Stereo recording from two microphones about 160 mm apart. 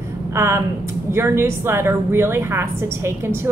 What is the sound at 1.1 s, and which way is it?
A woman's voice, 15° right (ahead or behind).